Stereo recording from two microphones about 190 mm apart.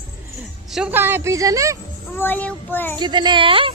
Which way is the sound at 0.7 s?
10° right (ahead or behind).